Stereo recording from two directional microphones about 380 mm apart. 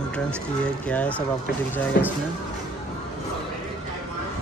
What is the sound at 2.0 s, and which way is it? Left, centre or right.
Speech, left.